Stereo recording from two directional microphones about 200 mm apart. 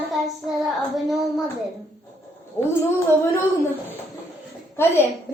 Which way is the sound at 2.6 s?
10° left (ahead or behind).